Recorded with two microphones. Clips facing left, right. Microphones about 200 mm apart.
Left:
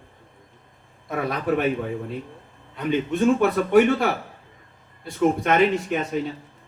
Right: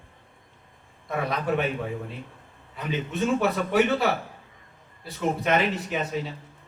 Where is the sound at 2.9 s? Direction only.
55° left (ahead or behind).